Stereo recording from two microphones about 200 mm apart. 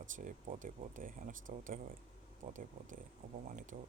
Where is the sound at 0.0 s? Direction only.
40° right (ahead or behind).